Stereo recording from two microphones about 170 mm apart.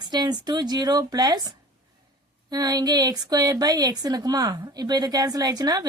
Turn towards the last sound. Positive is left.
turn(degrees=-25)  # may be behind; listen again after turning